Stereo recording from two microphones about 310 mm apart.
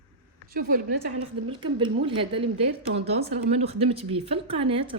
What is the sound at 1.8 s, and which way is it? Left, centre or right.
Speech, centre.